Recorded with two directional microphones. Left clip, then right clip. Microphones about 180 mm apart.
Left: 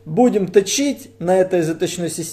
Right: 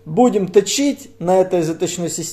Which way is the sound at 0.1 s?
Centre (ahead or behind).